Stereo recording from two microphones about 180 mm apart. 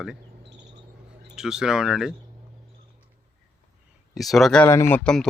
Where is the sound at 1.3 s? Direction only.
5° right (ahead or behind).